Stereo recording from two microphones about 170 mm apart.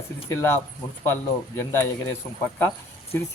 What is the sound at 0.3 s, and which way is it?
Speech, 15° left (ahead or behind).